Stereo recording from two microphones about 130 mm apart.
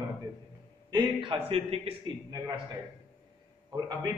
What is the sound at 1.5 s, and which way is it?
Speech, 50° right (ahead or behind).